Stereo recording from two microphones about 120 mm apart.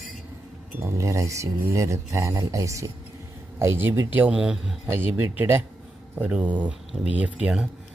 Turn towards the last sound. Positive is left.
turn(degrees=-10)  # may be behind; listen again after turning